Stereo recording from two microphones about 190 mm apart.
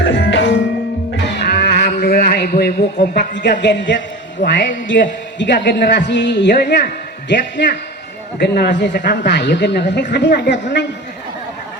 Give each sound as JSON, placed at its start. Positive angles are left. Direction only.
{"t": 0.0, "sound": "music", "side_deg": 70}
{"t": 1.4, "sound": "a sound", "side_deg": 60}
{"t": 3.6, "sound": "a woman's voice", "side_deg": 70}